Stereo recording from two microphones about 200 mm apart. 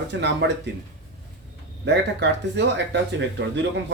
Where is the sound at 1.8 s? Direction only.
60° right (ahead or behind).